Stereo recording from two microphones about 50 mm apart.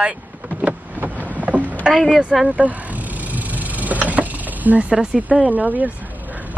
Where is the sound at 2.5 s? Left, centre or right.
Right.